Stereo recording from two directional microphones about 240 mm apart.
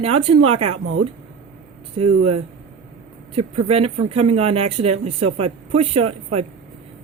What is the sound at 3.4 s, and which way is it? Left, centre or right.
Speech, right.